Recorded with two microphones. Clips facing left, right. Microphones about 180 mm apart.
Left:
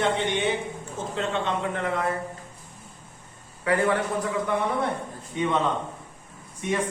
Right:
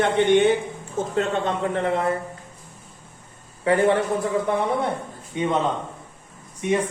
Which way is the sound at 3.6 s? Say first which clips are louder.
Right 5 dB; 25° right (ahead or behind).